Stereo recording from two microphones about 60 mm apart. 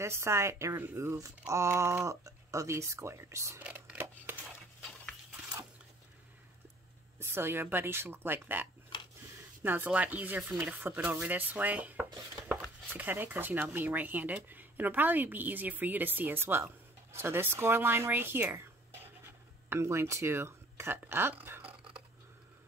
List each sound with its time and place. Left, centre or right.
0.0 s speech: right
7.2 s a sound: right
7.6 s speech: right
9.8 s speech: right
19.7 s speech: right